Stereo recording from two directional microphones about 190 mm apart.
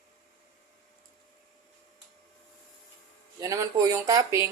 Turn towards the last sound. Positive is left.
turn(degrees=-15)  # may be behind; listen again after turning